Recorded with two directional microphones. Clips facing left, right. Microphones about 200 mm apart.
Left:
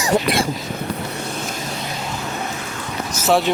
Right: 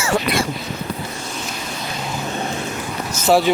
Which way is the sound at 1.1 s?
60° left (ahead or behind).